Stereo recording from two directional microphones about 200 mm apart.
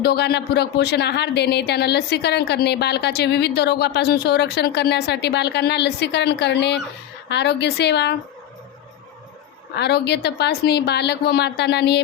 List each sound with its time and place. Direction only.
0.0 s speech: 55° left (ahead or behind)
9.7 s speech: 55° left (ahead or behind)